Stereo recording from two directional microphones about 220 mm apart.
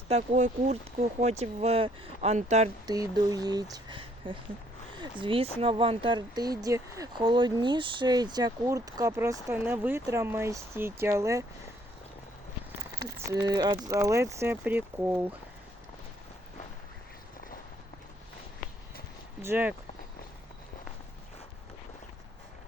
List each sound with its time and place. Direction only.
0.1 s speech: 35° right (ahead or behind)
2.8 s speech: 15° right (ahead or behind)
13.1 s speech: 15° right (ahead or behind)
19.4 s speech: 10° right (ahead or behind)